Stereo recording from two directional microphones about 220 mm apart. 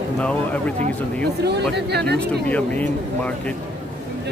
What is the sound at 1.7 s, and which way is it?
Speech, 50° right (ahead or behind).